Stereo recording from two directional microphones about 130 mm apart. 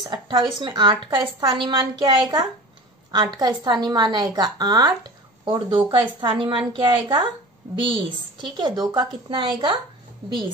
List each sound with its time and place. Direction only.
0.0 s a woman's voice: 40° right (ahead or behind)